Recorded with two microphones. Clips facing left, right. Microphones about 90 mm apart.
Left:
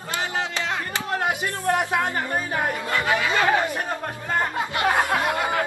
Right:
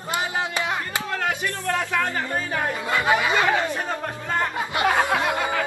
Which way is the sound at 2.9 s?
20° right (ahead or behind).